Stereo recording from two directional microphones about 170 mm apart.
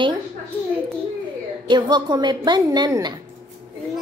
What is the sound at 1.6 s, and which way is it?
Speech, 25° right (ahead or behind).